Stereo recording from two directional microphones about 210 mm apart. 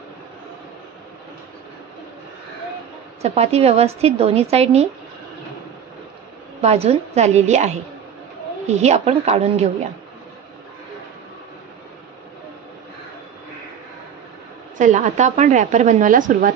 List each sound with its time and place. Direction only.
3.2 s a woman's voice: 30° right (ahead or behind)
6.6 s a woman's voice: 30° right (ahead or behind)
14.8 s a woman's voice: 35° right (ahead or behind)